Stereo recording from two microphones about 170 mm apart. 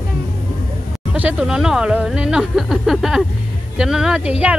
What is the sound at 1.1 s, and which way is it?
A woman's voice, 5° right (ahead or behind).